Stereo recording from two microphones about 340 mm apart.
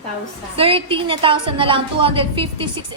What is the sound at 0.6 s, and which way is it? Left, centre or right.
A woman's voice, centre.